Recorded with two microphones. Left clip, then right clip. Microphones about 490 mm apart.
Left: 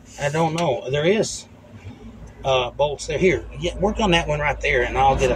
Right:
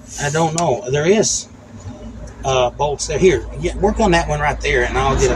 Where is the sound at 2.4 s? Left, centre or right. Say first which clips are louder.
Right 3 dB; left.